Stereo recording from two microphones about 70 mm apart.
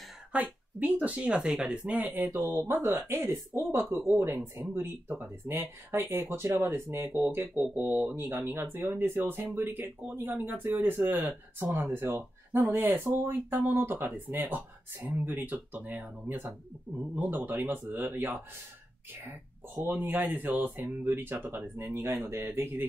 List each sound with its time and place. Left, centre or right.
0.3 s speech: right
19.7 s speech: right
21.9 s speech: right